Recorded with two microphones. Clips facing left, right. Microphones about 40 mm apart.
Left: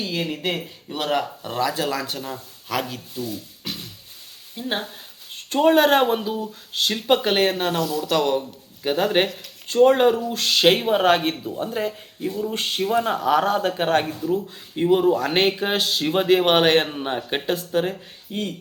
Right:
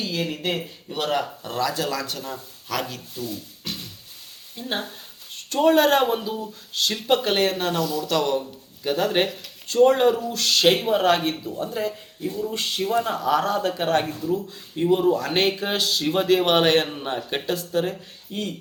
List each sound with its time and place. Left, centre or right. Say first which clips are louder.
0.0 s speech: left 1 dB; centre
5.3 s speech: left 1 dB; left
7.7 s speech: left 1 dB; centre
8.1 s speech: left 3 dB; left
9.8 s speech: left 1 dB; left
11.5 s speech: left 1 dB; left
14.0 s speech: left 2 dB; centre
14.8 s speech: left 2 dB; left
16.8 s speech: left 2 dB; centre
18.3 s speech: left 2 dB; centre